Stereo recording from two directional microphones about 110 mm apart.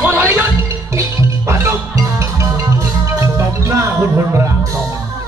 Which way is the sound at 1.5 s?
25° right (ahead or behind).